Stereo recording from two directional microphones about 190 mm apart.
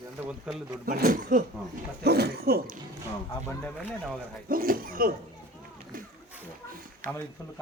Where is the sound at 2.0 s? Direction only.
55° right (ahead or behind).